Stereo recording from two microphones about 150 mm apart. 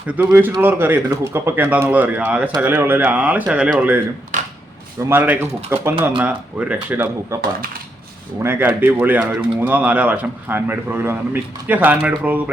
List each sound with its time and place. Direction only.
0.1 s speech: 10° right (ahead or behind)
4.3 s a sound: 60° right (ahead or behind)
5.0 s speech: 10° right (ahead or behind)
8.4 s speech: 15° right (ahead or behind)